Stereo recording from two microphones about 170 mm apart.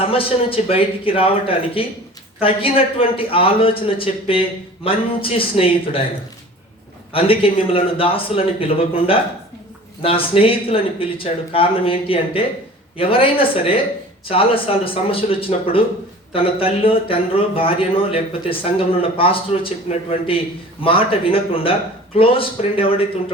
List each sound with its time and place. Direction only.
0.0 s a man's voice: 35° left (ahead or behind)
7.1 s a man's voice: 35° left (ahead or behind)